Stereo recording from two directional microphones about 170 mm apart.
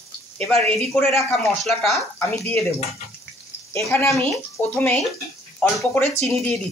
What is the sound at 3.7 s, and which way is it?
Speech, 15° left (ahead or behind).